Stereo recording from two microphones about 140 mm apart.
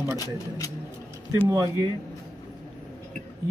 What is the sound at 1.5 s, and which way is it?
Speech, 25° right (ahead or behind).